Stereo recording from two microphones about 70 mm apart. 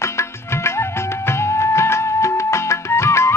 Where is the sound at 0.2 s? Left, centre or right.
Left.